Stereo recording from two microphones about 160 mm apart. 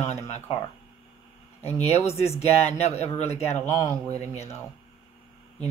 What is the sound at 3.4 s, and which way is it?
Speech, 15° left (ahead or behind).